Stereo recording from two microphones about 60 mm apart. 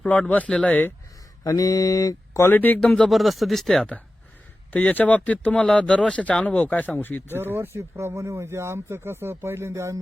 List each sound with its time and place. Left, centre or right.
0.3 s speech: left
1.5 s mantra: left
2.4 s speech: left
3.1 s speech: centre
4.7 s speech: left
7.3 s speech: right